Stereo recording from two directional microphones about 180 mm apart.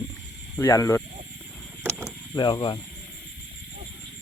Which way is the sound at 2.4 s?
25° left (ahead or behind).